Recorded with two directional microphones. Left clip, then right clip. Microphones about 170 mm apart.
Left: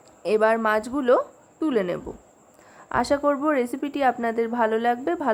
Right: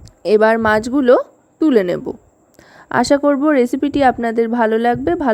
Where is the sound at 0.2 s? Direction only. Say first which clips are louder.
Right 8 dB; 45° right (ahead or behind).